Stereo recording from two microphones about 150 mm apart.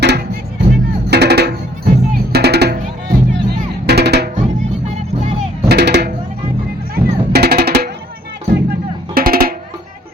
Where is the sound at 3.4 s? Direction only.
90° right.